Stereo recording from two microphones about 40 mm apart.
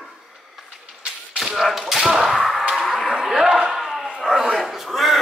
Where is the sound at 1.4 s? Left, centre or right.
Centre.